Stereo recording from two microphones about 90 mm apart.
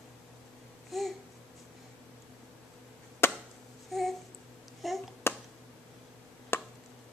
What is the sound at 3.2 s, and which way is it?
Chop, 25° left (ahead or behind).